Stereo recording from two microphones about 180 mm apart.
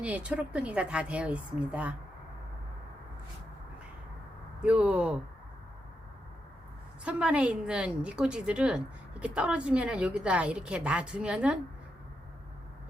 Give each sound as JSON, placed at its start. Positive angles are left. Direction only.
{"t": 0.0, "sound": "a woman's voice", "side_deg": -5}
{"t": 4.6, "sound": "a woman's voice", "side_deg": -5}
{"t": 7.0, "sound": "a woman's voice", "side_deg": -5}